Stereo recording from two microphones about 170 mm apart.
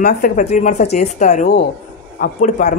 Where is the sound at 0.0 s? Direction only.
50° left (ahead or behind).